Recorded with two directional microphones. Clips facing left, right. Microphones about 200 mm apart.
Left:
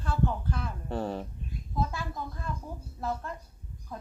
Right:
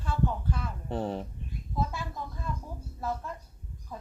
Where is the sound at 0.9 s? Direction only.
20° right (ahead or behind).